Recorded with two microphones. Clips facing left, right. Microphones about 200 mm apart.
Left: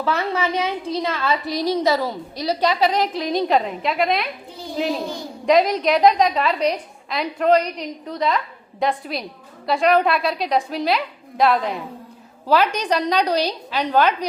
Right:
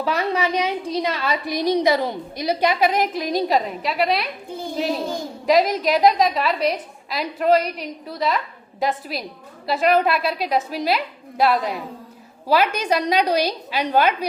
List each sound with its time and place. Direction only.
0.0 s a woman's voice: 15° right (ahead or behind)
4.5 s children playing: 50° right (ahead or behind)
5.5 s a woman's voice: 5° right (ahead or behind)